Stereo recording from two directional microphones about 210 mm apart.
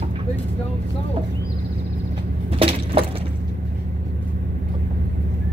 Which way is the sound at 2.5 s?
25° right (ahead or behind).